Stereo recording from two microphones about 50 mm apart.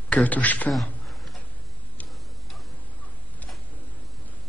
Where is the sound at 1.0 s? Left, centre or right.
Centre.